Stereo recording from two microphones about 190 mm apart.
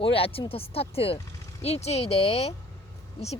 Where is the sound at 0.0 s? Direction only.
30° left (ahead or behind).